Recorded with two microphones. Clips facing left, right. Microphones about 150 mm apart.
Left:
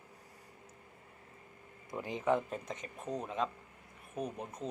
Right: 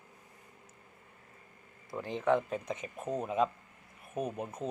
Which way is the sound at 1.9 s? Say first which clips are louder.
Right 3 dB; 10° left (ahead or behind).